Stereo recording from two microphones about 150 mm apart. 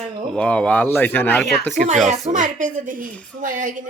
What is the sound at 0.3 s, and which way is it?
Speech, 10° left (ahead or behind).